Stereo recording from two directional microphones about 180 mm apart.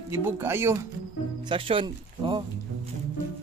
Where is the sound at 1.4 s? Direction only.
30° right (ahead or behind).